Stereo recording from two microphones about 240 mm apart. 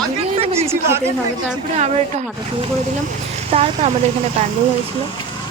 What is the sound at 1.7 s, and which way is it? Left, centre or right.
Speech, right.